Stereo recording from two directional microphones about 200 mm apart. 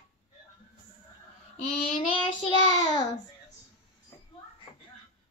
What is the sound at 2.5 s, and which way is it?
Child singing, 20° left (ahead or behind).